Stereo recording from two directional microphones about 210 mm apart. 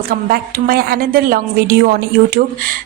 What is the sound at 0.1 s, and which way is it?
Speech, 45° right (ahead or behind).